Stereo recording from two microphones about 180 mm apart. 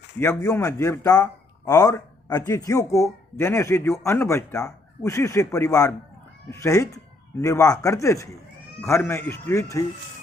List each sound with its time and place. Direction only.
0.2 s a man's voice: 20° left (ahead or behind)